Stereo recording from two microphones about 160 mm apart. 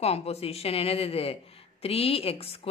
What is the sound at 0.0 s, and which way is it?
A man's voice, 40° left (ahead or behind).